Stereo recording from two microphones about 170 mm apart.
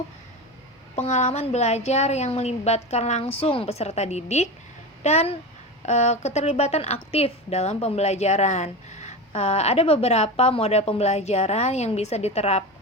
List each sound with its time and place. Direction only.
0.9 s a woman's voice: 40° left (ahead or behind)